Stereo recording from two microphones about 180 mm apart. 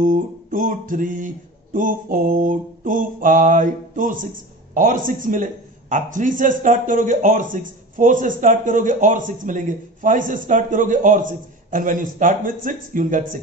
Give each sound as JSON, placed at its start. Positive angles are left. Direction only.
{"t": 0.0, "sound": "speech", "side_deg": -45}